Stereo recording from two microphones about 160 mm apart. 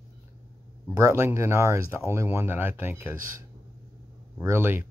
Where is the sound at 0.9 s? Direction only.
15° right (ahead or behind).